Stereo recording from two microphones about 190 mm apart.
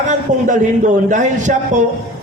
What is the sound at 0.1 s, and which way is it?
A man's voice, 40° right (ahead or behind).